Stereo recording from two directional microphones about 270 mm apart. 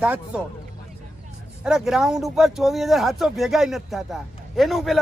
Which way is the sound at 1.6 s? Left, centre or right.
Centre.